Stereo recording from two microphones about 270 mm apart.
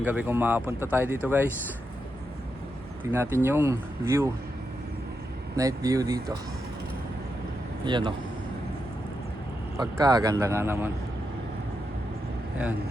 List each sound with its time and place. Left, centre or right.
0.0 s speech: centre
3.0 s speech: centre
5.5 s speech: centre
7.9 s speech: centre
9.7 s speech: centre